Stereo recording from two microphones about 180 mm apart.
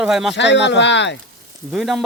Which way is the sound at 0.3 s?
75° left (ahead or behind).